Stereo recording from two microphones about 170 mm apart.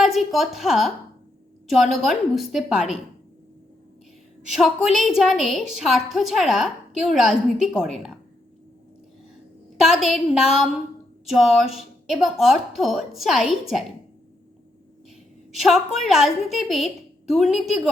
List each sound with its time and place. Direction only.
0.0 s a woman's voice: centre (ahead or behind)
4.6 s a woman's voice: centre (ahead or behind)
9.8 s a woman's voice: centre (ahead or behind)
15.6 s a woman's voice: centre (ahead or behind)